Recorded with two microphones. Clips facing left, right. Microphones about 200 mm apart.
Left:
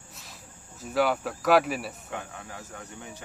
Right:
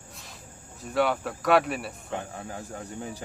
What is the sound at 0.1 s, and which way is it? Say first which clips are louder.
Cricket: right 2 dB; centre (ahead or behind).